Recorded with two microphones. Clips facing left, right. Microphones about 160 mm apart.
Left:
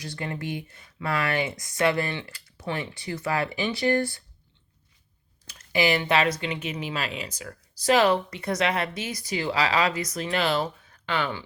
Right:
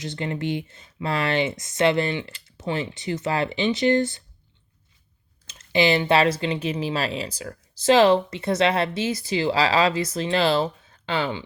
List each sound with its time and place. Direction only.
0.0 s speech: 20° right (ahead or behind)
5.5 s speech: 25° right (ahead or behind)